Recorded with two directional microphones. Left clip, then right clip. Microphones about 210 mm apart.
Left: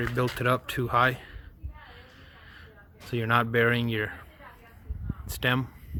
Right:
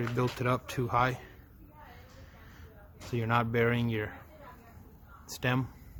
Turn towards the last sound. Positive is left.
turn(degrees=10)  # may be behind; listen again after turning